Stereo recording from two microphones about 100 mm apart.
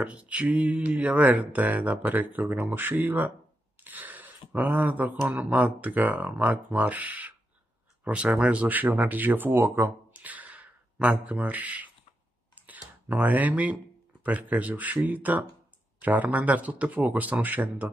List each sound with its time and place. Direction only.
0.0 s speech: 15° right (ahead or behind)
12.6 s a sound: 10° right (ahead or behind)
14.2 s speech: 15° right (ahead or behind)